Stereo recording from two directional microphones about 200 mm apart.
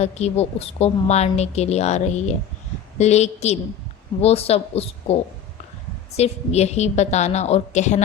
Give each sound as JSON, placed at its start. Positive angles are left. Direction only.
{"t": 0.0, "sound": "a woman's voice", "side_deg": 35}
{"t": 6.1, "sound": "a woman's voice", "side_deg": 30}